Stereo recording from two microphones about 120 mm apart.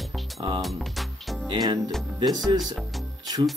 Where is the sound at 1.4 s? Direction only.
35° right (ahead or behind).